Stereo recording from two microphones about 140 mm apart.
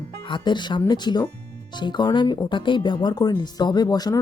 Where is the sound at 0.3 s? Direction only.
35° left (ahead or behind).